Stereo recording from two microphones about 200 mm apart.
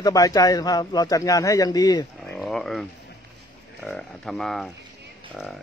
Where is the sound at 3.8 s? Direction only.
5° left (ahead or behind).